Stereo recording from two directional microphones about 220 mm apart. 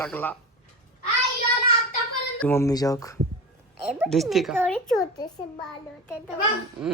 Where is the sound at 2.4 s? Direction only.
10° left (ahead or behind).